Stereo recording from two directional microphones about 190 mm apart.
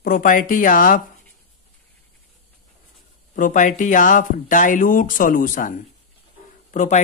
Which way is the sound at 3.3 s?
45° left (ahead or behind).